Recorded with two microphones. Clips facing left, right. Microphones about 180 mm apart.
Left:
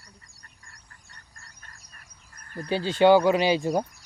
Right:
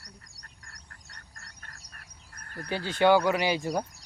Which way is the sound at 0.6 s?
75° right (ahead or behind).